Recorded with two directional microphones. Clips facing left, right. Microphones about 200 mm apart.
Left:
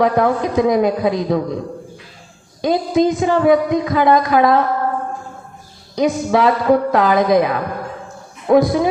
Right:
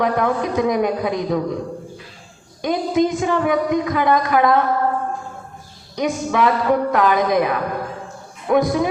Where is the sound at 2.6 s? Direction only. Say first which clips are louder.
Left 3 dB; 30° left (ahead or behind).